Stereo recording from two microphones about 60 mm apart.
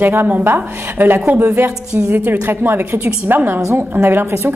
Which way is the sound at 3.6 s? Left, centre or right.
Right.